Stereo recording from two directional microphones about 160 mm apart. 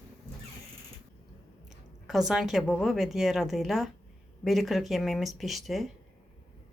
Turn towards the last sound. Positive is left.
turn(degrees=0)  # may be behind; listen again after turning